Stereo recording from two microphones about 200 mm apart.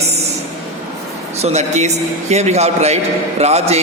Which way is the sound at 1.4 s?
35° right (ahead or behind).